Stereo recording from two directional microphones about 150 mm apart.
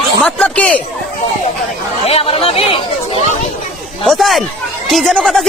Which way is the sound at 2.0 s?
40° left (ahead or behind).